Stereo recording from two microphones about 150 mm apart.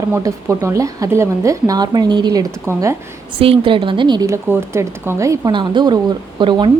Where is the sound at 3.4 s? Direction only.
40° right (ahead or behind).